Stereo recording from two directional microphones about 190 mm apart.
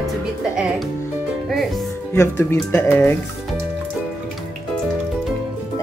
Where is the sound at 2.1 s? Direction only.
15° left (ahead or behind).